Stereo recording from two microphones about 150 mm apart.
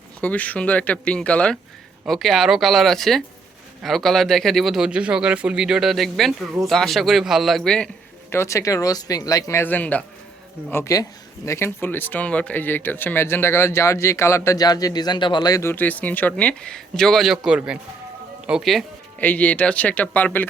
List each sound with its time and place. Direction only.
0.2 s speech: 10° left (ahead or behind)
8.3 s speech: 20° left (ahead or behind); by 18.9 s centre (ahead or behind)
19.2 s speech: 10° left (ahead or behind)